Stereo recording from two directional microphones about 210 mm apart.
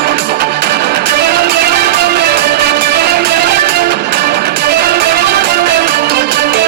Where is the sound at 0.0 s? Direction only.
50° right (ahead or behind).